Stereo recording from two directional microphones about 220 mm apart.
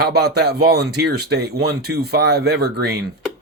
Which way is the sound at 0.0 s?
45° right (ahead or behind).